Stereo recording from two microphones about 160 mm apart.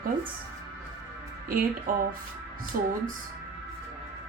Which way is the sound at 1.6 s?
60° right (ahead or behind).